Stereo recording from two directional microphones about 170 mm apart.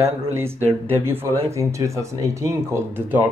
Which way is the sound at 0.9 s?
15° right (ahead or behind).